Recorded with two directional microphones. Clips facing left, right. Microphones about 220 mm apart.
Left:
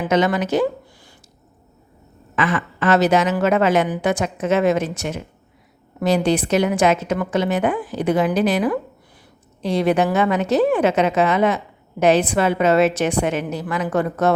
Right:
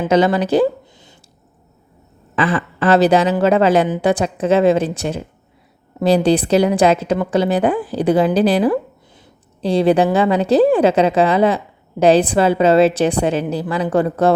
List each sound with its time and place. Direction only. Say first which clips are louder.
0.0 s a woman's voice: right 4 dB; 30° right (ahead or behind)
2.3 s a woman's voice: right 3 dB; 30° right (ahead or behind)